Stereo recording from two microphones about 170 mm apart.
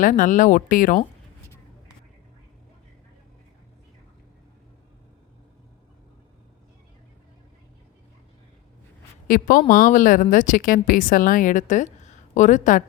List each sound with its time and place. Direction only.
0.0 s speech: 50° left (ahead or behind)
9.2 s speech: 55° left (ahead or behind)
12.0 s a sound: 45° left (ahead or behind)